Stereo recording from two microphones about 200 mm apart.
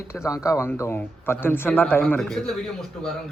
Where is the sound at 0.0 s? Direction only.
15° left (ahead or behind).